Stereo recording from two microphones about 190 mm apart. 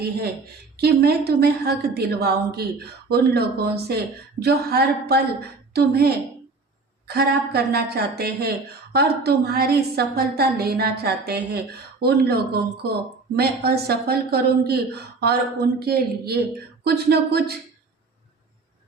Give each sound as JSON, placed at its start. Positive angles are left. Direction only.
{"t": 0.8, "sound": "speech", "side_deg": -55}